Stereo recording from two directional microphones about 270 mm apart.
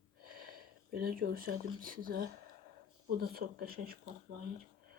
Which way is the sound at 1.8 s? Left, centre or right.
Right.